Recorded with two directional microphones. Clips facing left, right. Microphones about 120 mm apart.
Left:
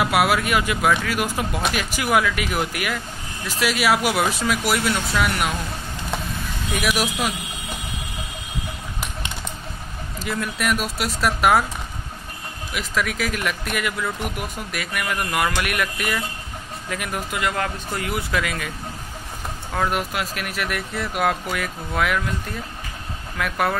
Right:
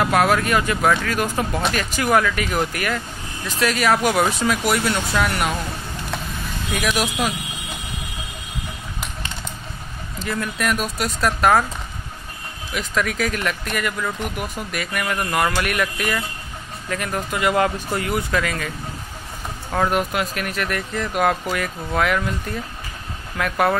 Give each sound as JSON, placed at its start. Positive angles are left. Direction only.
{"t": 0.0, "sound": "speech", "side_deg": 10}
{"t": 6.7, "sound": "speech", "side_deg": 5}
{"t": 10.1, "sound": "speech", "side_deg": 5}
{"t": 12.7, "sound": "speech", "side_deg": 5}
{"t": 17.5, "sound": "speech", "side_deg": -10}
{"t": 18.0, "sound": "speech", "side_deg": 5}
{"t": 19.7, "sound": "speech", "side_deg": 0}